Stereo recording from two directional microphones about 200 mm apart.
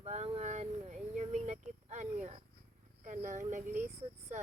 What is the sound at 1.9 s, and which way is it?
Speech, 35° right (ahead or behind).